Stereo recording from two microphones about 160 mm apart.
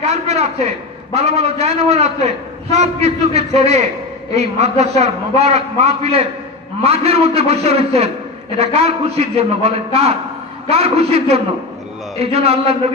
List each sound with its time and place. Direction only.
0.0 s a man's voice: 45° right (ahead or behind)